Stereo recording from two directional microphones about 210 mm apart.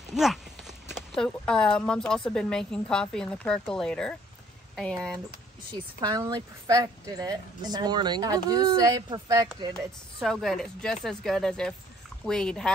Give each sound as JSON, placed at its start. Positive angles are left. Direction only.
{"t": 0.1, "sound": "speech", "side_deg": 0}
{"t": 5.7, "sound": "speech", "side_deg": -20}
{"t": 9.8, "sound": "speech", "side_deg": 0}